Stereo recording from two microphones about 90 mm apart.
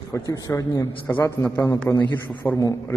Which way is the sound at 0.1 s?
40° left (ahead or behind).